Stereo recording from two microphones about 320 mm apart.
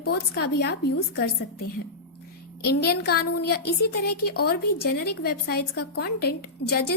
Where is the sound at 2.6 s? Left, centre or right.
Left.